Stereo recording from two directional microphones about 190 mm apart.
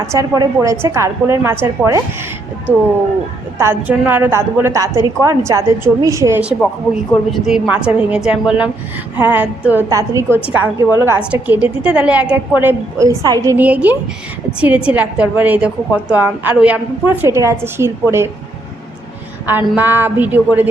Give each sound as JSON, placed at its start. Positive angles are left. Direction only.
{"t": 0.1, "sound": "a woman's voice", "side_deg": -15}
{"t": 3.6, "sound": "a woman's voice", "side_deg": -10}
{"t": 7.1, "sound": "a woman's voice", "side_deg": 0}
{"t": 19.5, "sound": "a woman's voice", "side_deg": -10}